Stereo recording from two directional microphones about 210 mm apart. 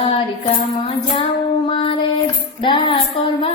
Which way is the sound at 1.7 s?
25° left (ahead or behind).